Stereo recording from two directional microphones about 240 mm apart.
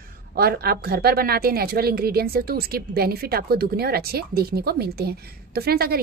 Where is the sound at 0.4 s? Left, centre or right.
Right.